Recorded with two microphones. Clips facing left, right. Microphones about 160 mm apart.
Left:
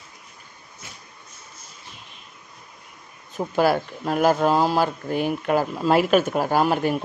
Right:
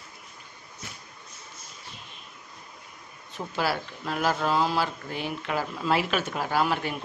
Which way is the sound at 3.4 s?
45° left (ahead or behind).